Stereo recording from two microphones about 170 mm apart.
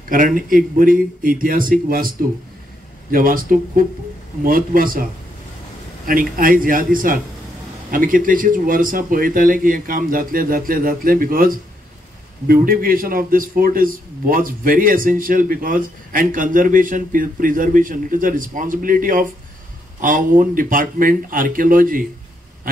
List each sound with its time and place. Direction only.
0.1 s a man's voice: 55° right (ahead or behind)
6.0 s a man's voice: 55° right (ahead or behind)